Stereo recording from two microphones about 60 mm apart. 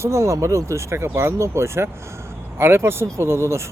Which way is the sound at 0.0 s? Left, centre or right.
Right.